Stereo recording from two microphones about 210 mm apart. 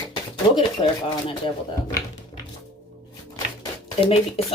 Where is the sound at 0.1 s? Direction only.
20° left (ahead or behind).